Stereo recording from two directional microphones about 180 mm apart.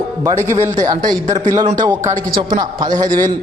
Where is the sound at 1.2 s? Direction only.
45° right (ahead or behind).